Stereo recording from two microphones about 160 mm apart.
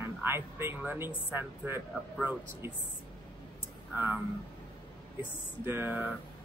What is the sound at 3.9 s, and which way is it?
Speech, 10° right (ahead or behind).